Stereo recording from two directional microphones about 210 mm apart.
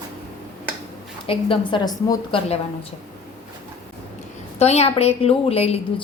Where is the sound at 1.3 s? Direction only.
25° left (ahead or behind).